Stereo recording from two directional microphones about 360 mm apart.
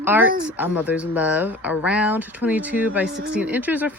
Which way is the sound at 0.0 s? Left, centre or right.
Centre.